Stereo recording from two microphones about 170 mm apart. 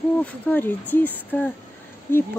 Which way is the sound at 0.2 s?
10° left (ahead or behind).